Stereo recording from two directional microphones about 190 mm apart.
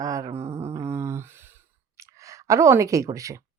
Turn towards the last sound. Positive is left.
turn(degrees=-15)  # may be behind; listen again after turning